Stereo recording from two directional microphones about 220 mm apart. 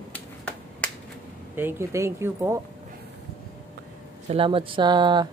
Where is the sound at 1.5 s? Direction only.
10° right (ahead or behind).